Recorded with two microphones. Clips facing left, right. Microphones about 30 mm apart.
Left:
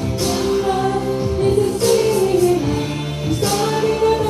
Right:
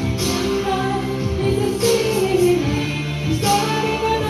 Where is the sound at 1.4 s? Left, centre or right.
Centre.